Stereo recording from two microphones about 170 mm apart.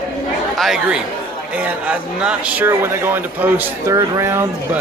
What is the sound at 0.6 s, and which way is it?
Speech, 5° right (ahead or behind).